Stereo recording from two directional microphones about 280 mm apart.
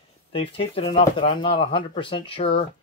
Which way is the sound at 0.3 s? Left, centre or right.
Centre.